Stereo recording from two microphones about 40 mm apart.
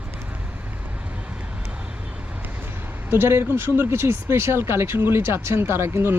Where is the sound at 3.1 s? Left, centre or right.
Right.